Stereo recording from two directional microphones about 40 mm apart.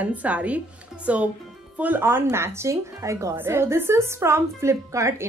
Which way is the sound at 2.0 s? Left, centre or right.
Right.